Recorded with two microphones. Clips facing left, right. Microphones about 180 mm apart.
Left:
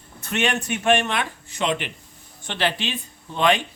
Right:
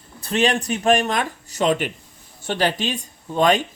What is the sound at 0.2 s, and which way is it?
Speech, 35° right (ahead or behind).